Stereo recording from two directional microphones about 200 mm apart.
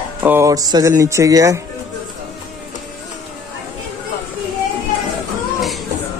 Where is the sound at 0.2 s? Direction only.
10° right (ahead or behind).